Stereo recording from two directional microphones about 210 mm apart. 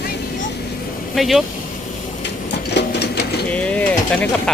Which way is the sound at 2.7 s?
50° left (ahead or behind).